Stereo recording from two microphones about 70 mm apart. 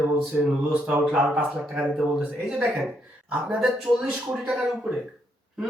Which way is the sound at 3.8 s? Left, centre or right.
Centre.